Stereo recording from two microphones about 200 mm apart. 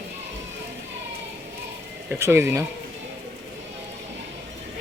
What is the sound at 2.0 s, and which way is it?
Speech, 15° right (ahead or behind).